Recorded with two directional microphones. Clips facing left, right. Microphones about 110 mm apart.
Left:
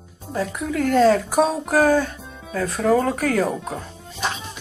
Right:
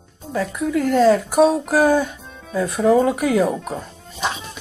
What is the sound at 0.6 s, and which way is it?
Speech, 5° right (ahead or behind).